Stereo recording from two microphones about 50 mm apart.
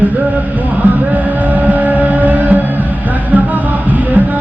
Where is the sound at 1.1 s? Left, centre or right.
Right.